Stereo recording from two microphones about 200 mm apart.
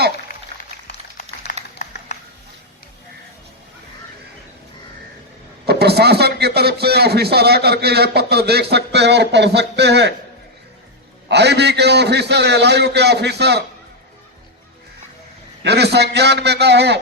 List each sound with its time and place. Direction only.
0.9 s a sound: 50° left (ahead or behind)
5.6 s a man's voice: 55° right (ahead or behind)
11.3 s a man's voice: 55° right (ahead or behind)
15.6 s a man's voice: 55° right (ahead or behind)